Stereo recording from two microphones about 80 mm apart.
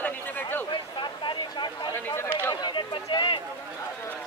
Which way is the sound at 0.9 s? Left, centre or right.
Left.